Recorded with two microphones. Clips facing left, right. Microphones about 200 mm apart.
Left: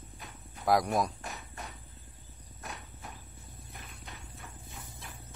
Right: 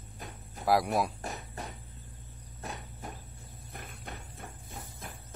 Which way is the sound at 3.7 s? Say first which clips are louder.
Right 6 dB; 50° right (ahead or behind).